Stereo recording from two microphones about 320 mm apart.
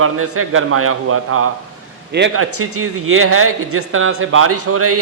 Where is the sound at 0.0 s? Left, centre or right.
Right.